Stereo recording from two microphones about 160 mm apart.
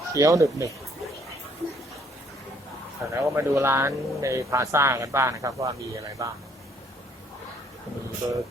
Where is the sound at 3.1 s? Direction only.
20° right (ahead or behind).